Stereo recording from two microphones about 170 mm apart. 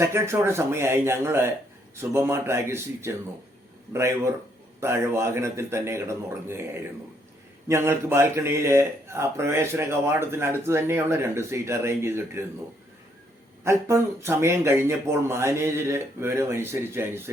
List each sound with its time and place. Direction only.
0.0 s speech: 15° right (ahead or behind)
13.7 s speech: 15° right (ahead or behind)